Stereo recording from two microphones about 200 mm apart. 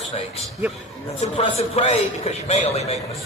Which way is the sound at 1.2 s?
30° left (ahead or behind).